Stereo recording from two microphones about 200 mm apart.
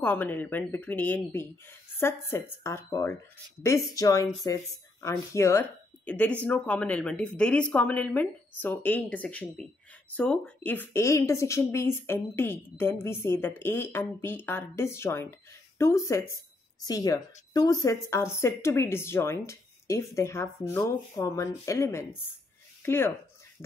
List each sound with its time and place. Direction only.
0.0 s speech: 10° left (ahead or behind)